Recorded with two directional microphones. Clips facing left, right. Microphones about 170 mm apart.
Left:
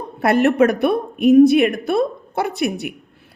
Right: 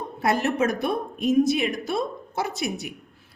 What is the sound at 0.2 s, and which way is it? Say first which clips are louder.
A woman's voice: left 8 dB; 65° left (ahead or behind).